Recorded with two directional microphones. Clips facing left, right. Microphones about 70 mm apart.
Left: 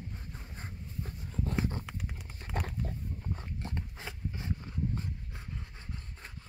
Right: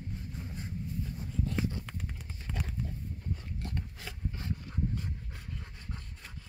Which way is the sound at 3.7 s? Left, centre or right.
Left.